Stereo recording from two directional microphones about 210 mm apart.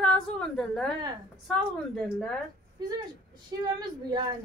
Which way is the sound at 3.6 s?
20° right (ahead or behind).